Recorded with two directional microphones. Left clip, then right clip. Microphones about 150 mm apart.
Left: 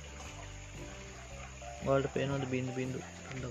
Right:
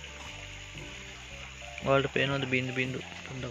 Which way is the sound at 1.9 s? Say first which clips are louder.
Right 5 dB; 15° right (ahead or behind).